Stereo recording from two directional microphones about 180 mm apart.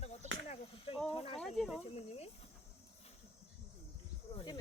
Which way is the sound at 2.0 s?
35° left (ahead or behind).